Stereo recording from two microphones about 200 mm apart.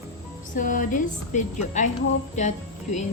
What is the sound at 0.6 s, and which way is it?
Speech, 40° left (ahead or behind).